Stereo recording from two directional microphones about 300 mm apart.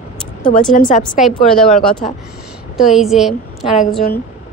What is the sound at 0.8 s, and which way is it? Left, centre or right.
Speech, left.